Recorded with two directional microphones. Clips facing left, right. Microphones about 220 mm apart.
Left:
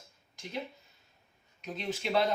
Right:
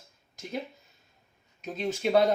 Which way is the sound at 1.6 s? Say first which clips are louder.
Right 6 dB; 45° right (ahead or behind).